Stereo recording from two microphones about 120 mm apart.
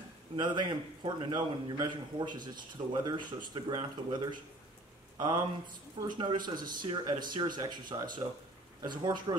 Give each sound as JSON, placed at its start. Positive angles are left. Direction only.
{"t": 0.4, "sound": "a man's voice", "side_deg": -40}